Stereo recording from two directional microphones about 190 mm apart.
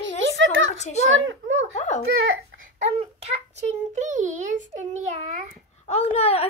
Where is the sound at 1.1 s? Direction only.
90° right.